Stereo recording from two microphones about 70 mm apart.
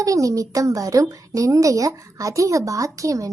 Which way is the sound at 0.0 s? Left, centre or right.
Right.